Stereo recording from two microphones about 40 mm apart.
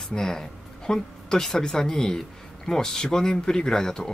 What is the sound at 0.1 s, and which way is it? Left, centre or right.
Speech, centre.